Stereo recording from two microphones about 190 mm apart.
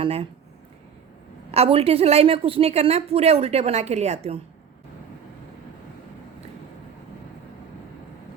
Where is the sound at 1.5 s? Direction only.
30° right (ahead or behind).